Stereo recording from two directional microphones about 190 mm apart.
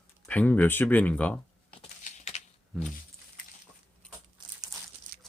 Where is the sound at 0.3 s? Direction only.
10° left (ahead or behind).